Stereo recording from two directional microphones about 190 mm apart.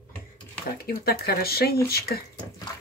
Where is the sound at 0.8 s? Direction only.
55° left (ahead or behind).